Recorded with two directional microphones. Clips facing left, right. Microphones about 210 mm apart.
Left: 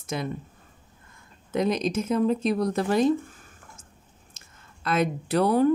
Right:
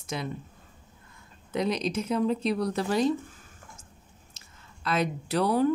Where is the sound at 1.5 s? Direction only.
50° left (ahead or behind).